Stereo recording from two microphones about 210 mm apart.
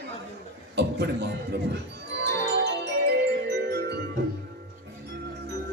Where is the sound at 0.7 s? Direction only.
50° right (ahead or behind).